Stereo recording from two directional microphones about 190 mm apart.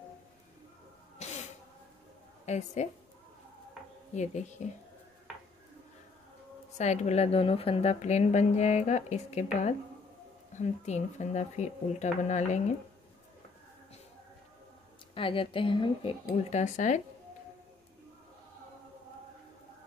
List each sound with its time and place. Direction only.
1.1 s sneeze: 35° left (ahead or behind)
2.4 s a woman's voice: 35° left (ahead or behind)
4.1 s a woman's voice: 40° left (ahead or behind)
6.8 s a woman's voice: 35° left (ahead or behind)
15.1 s speech: 25° left (ahead or behind)